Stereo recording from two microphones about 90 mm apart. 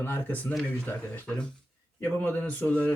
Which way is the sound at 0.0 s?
20° left (ahead or behind).